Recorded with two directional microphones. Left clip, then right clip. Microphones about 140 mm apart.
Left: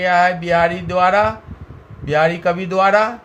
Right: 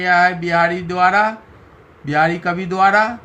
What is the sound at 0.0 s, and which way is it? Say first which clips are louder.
Speech: even; 50° left (ahead or behind).